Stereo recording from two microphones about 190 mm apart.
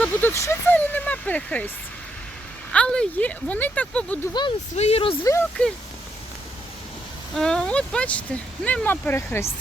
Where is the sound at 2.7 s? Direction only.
5° left (ahead or behind).